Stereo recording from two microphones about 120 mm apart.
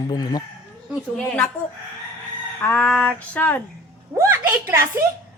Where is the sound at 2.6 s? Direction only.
10° left (ahead or behind).